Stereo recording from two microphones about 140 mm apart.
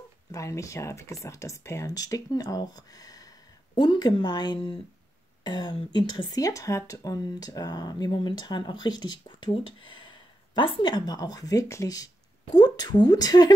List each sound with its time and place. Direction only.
0.3 s speech: 20° left (ahead or behind)